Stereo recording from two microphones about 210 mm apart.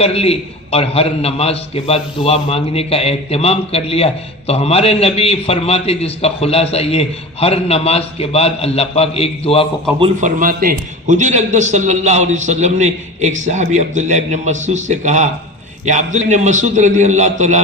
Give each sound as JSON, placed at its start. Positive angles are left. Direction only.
{"t": 0.0, "sound": "a man's voice", "side_deg": 30}
{"t": 10.0, "sound": "a man's voice", "side_deg": -35}